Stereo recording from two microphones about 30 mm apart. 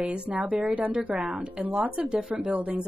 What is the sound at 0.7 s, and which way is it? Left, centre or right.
Speech, right.